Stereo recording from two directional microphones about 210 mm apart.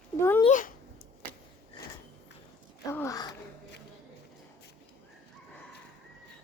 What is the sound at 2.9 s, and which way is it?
Speech, 15° left (ahead or behind).